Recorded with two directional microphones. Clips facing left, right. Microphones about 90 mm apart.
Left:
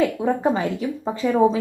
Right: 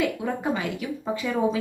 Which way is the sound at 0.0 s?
30° left (ahead or behind).